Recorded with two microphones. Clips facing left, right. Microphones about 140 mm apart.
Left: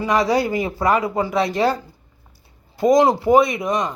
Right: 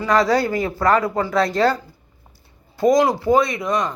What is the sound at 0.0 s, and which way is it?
Speech, 15° left (ahead or behind).